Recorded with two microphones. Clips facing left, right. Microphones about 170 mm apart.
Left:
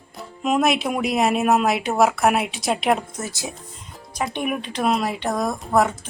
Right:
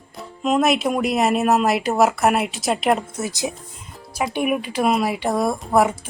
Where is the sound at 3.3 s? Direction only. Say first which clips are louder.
Right 6 dB; 20° right (ahead or behind).